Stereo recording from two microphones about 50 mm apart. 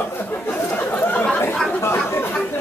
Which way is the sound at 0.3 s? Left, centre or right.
Left.